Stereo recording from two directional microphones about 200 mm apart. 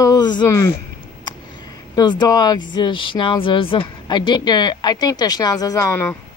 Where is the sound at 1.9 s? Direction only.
20° left (ahead or behind).